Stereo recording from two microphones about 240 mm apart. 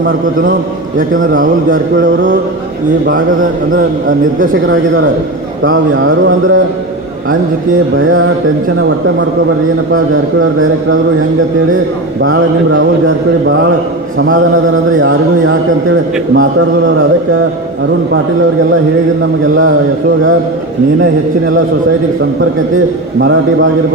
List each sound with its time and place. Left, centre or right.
1.1 s a man's voice: right
4.6 s speech: right
7.9 s speech: right
12.2 s speech: right
15.0 s a man's voice: right